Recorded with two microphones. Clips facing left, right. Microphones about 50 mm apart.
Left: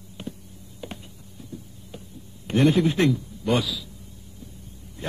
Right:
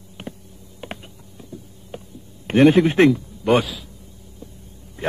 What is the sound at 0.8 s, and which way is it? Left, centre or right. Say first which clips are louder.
Typing: right 3 dB; right.